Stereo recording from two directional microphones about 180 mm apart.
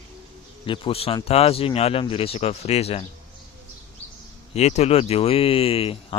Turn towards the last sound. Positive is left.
turn(degrees=30)  # may be behind; listen again after turning